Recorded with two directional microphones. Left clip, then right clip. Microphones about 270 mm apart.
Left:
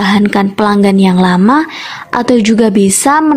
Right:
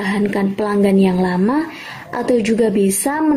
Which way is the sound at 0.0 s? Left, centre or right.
Left.